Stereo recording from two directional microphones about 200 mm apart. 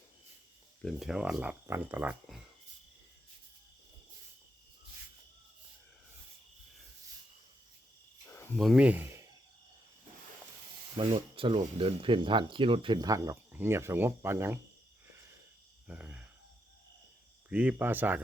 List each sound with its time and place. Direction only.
0.8 s speech: centre (ahead or behind)
8.5 s speech: 5° right (ahead or behind)
11.3 s speech: 25° right (ahead or behind); by 14.6 s 10° right (ahead or behind)
15.9 s speech: 5° right (ahead or behind)
17.5 s speech: 5° right (ahead or behind)